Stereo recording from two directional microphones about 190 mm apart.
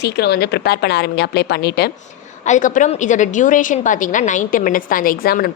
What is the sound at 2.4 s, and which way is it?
A woman's voice, 40° left (ahead or behind).